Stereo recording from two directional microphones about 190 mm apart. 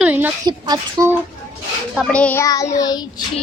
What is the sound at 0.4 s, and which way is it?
Speech, 20° right (ahead or behind).